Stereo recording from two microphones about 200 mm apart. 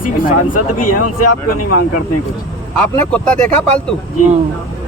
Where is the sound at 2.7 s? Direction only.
5° left (ahead or behind).